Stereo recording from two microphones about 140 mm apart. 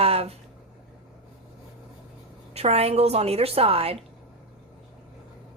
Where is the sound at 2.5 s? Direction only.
45° right (ahead or behind).